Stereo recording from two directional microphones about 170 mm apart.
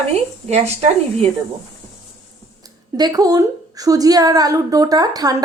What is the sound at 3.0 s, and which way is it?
A woman's voice, 20° right (ahead or behind).